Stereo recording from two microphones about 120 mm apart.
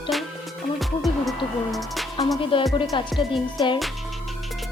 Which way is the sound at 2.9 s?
40° left (ahead or behind).